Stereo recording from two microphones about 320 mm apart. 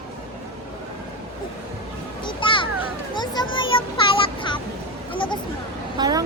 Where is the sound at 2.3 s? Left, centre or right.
Centre.